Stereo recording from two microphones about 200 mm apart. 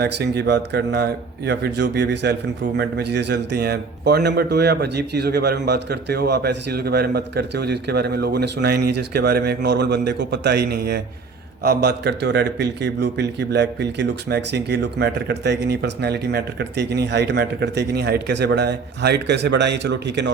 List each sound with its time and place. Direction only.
0.0 s a man's voice: 55° right (ahead or behind)